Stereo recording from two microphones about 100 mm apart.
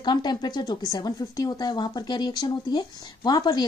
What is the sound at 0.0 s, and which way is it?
Speech, 45° left (ahead or behind).